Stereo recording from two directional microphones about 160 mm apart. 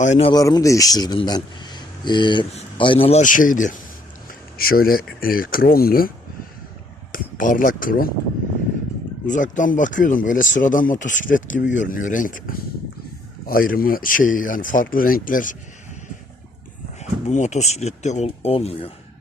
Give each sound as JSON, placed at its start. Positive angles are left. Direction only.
{"t": 0.0, "sound": "speech", "side_deg": 45}
{"t": 0.3, "sound": "a man's voice", "side_deg": 25}
{"t": 3.2, "sound": "speech", "side_deg": 55}
{"t": 4.3, "sound": "speech", "side_deg": 65}
{"t": 7.1, "sound": "speech", "side_deg": 55}
{"t": 9.2, "sound": "speech", "side_deg": 55}
{"t": 17.0, "sound": "speech", "side_deg": 45}